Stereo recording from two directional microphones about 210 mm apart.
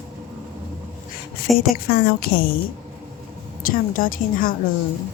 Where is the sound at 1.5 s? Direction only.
45° left (ahead or behind).